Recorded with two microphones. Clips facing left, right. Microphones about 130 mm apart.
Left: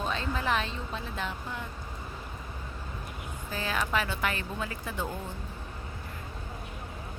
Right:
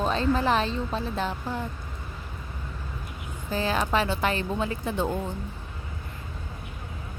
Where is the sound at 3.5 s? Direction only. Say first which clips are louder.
Right 6 dB; 30° right (ahead or behind).